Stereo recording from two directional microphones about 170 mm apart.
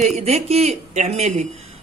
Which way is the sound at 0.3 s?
40° right (ahead or behind).